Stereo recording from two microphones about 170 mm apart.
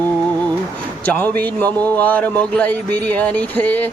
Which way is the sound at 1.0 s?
10° left (ahead or behind).